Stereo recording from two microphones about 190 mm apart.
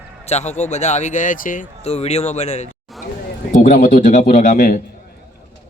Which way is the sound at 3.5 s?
40° left (ahead or behind).